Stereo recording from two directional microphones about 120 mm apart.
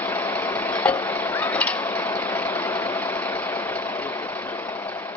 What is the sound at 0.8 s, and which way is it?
Stir, 15° left (ahead or behind).